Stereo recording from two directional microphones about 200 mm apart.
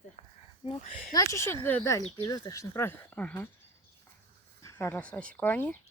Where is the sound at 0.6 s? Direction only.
25° left (ahead or behind); by 3.5 s 10° left (ahead or behind).